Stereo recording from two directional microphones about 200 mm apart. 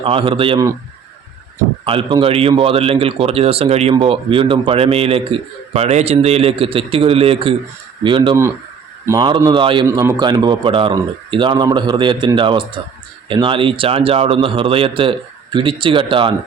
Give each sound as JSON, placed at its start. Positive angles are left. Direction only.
{"t": 0.0, "sound": "a man's voice", "side_deg": -25}
{"t": 1.8, "sound": "a man's voice", "side_deg": -25}
{"t": 9.8, "sound": "a man's voice", "side_deg": -15}